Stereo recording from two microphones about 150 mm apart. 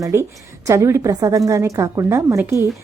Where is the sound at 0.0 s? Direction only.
20° right (ahead or behind).